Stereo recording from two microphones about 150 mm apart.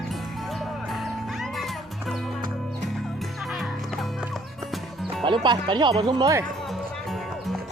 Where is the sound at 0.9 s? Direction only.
Centre (ahead or behind).